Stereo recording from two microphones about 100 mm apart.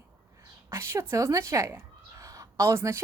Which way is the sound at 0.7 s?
30° right (ahead or behind).